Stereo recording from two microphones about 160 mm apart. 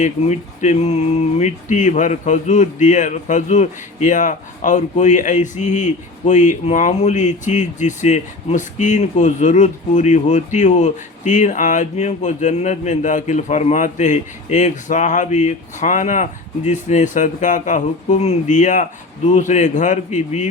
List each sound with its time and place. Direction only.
0.0 s speech: 50° left (ahead or behind)